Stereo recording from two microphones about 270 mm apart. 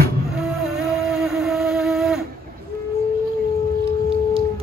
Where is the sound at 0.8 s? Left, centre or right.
Centre.